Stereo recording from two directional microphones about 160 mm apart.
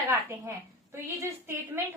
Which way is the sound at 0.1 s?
15° right (ahead or behind).